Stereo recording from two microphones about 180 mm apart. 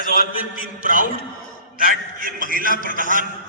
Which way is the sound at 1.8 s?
50° right (ahead or behind).